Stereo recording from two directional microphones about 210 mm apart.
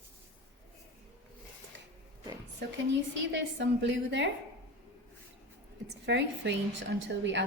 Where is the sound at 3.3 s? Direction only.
55° right (ahead or behind).